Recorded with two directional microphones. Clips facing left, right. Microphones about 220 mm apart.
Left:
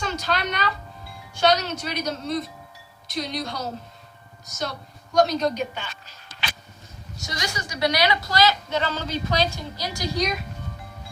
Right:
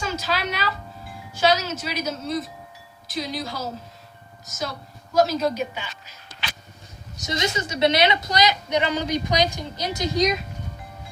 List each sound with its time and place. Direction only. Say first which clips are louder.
0.0 s a sound: even; 5° right (ahead or behind)
1.4 s a woman's voice: even; 5° right (ahead or behind)
7.2 s a woman's voice: right 6 dB; 20° right (ahead or behind)